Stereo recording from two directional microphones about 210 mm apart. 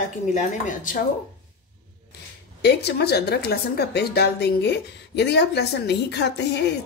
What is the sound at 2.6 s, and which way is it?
A woman's voice, 50° left (ahead or behind).